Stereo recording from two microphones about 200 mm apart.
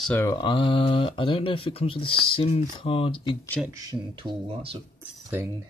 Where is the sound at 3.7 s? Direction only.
20° right (ahead or behind).